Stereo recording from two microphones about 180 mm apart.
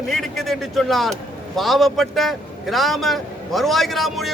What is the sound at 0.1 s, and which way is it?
A man's voice, centre (ahead or behind).